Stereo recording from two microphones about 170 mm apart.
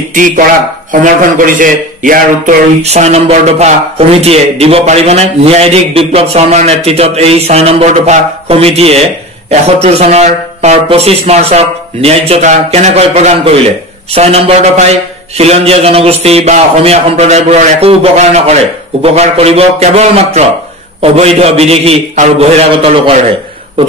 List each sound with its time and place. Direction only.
1.0 s a man's voice: 50° right (ahead or behind)
2.8 s a man's voice: 40° right (ahead or behind)